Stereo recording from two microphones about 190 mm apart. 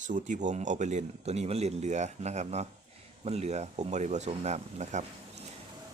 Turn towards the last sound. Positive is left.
turn(degrees=-35)  # may be behind; listen again after turning